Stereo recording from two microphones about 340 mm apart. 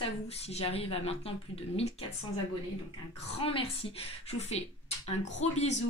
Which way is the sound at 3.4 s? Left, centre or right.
Centre.